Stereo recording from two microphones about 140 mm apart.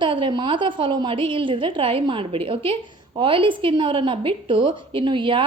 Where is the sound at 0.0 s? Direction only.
35° right (ahead or behind).